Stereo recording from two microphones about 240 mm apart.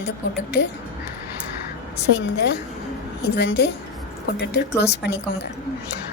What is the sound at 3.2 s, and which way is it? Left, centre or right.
Speech, left.